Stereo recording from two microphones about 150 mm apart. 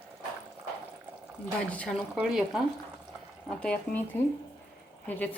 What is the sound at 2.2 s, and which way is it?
Speech, 5° right (ahead or behind).